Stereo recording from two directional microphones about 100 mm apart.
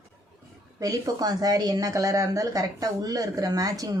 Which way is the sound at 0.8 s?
35° right (ahead or behind).